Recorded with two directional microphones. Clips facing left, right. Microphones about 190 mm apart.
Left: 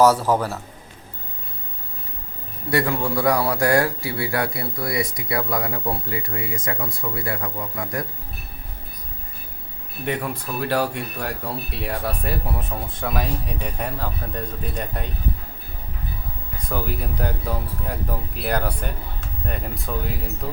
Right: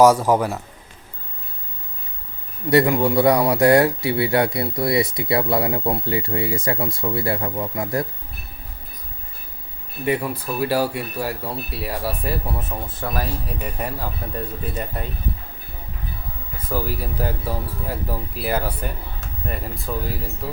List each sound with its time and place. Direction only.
0.0 s a man's voice: 10° right (ahead or behind)
2.6 s speech: 20° right (ahead or behind)
10.1 s speech: 10° right (ahead or behind)
16.6 s speech: 5° right (ahead or behind)